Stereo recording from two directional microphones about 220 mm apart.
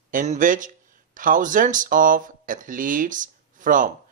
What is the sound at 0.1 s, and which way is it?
Speech, 35° right (ahead or behind).